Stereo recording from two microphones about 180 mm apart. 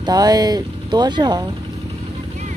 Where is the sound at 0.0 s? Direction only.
20° right (ahead or behind).